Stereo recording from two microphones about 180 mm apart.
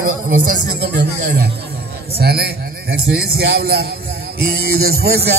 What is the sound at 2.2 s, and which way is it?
A man's voice, 60° right (ahead or behind).